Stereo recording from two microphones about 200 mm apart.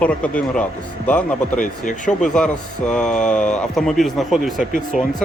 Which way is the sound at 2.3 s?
5° left (ahead or behind).